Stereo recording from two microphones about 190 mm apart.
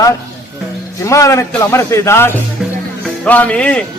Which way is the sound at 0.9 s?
15° left (ahead or behind).